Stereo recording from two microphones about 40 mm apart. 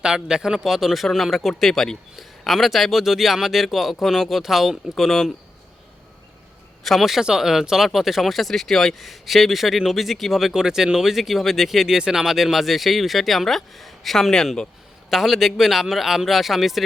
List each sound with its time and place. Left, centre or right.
0.0 s a man's voice: centre
6.8 s a man's voice: centre
10.5 s a man's voice: centre
15.1 s speech: centre